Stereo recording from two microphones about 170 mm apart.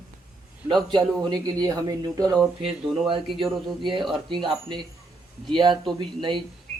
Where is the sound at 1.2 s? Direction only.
25° right (ahead or behind).